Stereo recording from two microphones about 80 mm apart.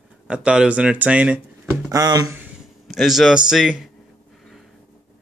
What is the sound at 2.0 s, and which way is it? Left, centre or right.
Speech, right.